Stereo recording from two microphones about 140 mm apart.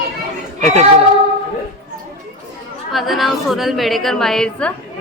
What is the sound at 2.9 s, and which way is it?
A woman's voice, centre (ahead or behind).